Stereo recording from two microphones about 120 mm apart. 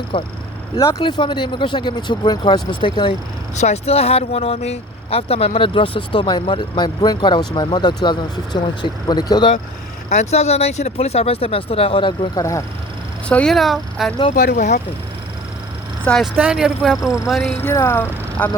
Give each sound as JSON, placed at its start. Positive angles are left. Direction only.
{"t": 0.1, "sound": "speech", "side_deg": 50}
{"t": 0.8, "sound": "speech", "side_deg": 30}
{"t": 1.0, "sound": "speech", "side_deg": 40}
{"t": 3.6, "sound": "speech", "side_deg": 60}
{"t": 10.1, "sound": "speech", "side_deg": 65}
{"t": 12.4, "sound": "speech", "side_deg": 25}
{"t": 13.2, "sound": "speech", "side_deg": 5}
{"t": 14.5, "sound": "speech", "side_deg": 90}
{"t": 16.0, "sound": "speech", "side_deg": 5}
{"t": 16.4, "sound": "speech", "side_deg": -5}
{"t": 17.6, "sound": "speech", "side_deg": 20}